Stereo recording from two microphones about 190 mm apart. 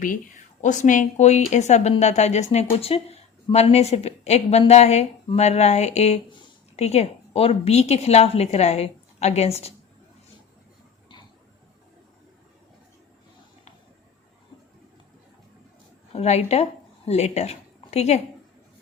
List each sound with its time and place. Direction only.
0.6 s a woman's voice: 40° left (ahead or behind)
16.1 s a woman's voice: 35° left (ahead or behind)